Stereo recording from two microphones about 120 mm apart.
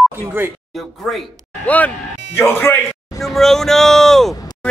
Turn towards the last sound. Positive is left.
turn(degrees=5)  # may be behind; listen again after turning